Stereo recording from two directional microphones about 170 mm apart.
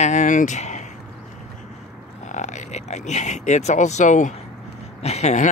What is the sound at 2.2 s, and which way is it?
Speech, 45° left (ahead or behind).